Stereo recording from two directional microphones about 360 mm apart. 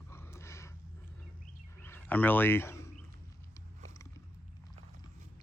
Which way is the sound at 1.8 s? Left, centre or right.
Centre.